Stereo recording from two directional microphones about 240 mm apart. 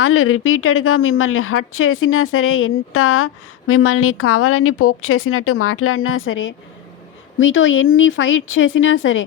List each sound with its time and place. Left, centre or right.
0.0 s a woman's voice: left